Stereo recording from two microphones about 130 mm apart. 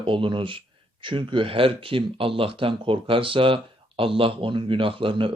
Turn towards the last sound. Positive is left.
turn(degrees=-40)  # may be behind; listen again after turning